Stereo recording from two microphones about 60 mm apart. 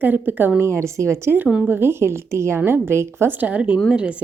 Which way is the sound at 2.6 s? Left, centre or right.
Right.